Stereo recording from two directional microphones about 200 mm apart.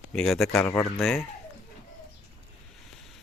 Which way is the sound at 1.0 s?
Centre (ahead or behind).